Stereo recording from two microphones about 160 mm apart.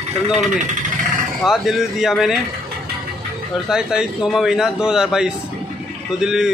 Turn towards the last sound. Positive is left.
turn(degrees=-5)  # may be behind; listen again after turning